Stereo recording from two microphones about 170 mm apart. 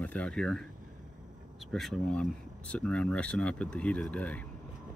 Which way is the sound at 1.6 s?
Centre (ahead or behind).